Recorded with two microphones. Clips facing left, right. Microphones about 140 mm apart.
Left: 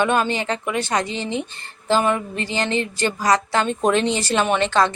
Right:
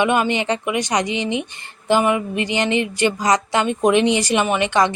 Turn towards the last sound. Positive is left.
turn(degrees=-15)  # may be behind; listen again after turning